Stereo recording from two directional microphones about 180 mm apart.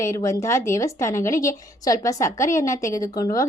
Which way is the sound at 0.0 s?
15° left (ahead or behind).